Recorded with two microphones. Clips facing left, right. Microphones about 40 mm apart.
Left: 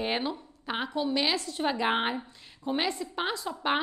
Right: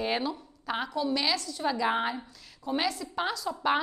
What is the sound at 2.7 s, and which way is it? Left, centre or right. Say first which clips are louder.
A woman's voice: even; left.